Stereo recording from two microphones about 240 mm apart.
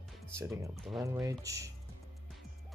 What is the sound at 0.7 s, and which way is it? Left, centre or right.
Speech, centre.